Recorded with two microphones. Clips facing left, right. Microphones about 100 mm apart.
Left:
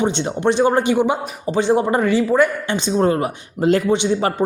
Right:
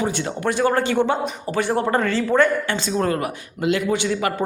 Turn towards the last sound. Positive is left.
turn(degrees=25)  # may be behind; listen again after turning